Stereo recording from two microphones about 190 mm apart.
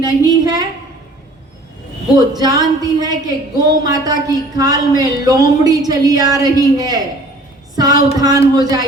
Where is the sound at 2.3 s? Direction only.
20° right (ahead or behind).